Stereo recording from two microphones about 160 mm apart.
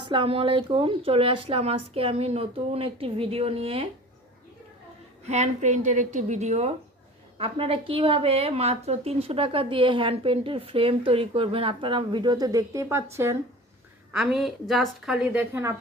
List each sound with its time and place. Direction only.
0.1 s a woman's voice: 35° right (ahead or behind)
5.2 s a woman's voice: 45° right (ahead or behind); by 13.4 s 15° right (ahead or behind)
14.1 s a woman's voice: 5° right (ahead or behind)